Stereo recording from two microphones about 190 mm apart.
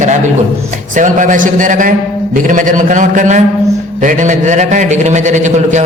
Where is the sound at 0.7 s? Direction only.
40° right (ahead or behind).